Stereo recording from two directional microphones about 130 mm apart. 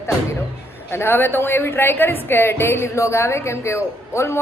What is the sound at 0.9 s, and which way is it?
A woman's voice, 20° left (ahead or behind).